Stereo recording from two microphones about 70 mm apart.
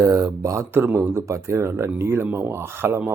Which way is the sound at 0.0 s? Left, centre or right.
Right.